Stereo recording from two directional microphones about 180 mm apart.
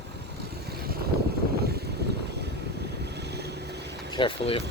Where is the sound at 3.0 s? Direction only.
70° right (ahead or behind).